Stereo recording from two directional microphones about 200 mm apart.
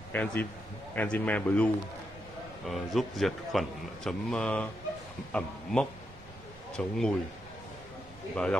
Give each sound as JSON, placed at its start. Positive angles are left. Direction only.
{"t": 0.1, "sound": "a man's voice", "side_deg": 10}
{"t": 2.7, "sound": "a man's voice", "side_deg": 0}